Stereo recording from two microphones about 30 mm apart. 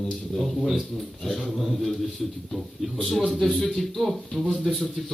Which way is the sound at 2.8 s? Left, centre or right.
Centre.